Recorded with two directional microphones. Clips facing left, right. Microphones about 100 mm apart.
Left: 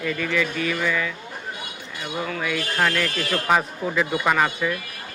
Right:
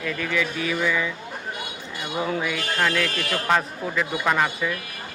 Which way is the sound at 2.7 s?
Centre (ahead or behind).